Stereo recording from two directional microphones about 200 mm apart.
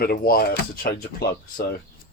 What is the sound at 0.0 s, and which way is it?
Speech, 50° left (ahead or behind).